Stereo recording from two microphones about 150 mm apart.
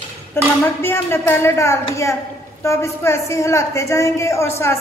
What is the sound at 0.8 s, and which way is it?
A woman's voice, 15° left (ahead or behind).